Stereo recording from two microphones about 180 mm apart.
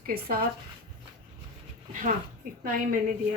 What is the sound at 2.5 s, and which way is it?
Speech, 50° right (ahead or behind).